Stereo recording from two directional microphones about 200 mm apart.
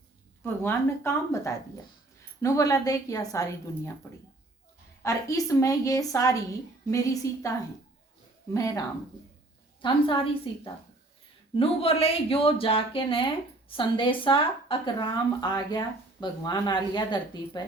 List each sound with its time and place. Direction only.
0.4 s a woman's voice: 10° left (ahead or behind)
5.0 s a woman's voice: 15° left (ahead or behind)
8.5 s a woman's voice: 15° left (ahead or behind)
9.8 s a woman's voice: 25° left (ahead or behind)